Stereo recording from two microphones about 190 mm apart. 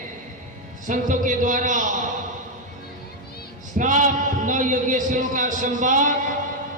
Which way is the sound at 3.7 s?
40° right (ahead or behind).